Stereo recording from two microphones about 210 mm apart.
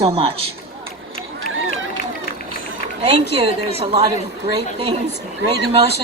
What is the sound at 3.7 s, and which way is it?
Speech, 30° right (ahead or behind).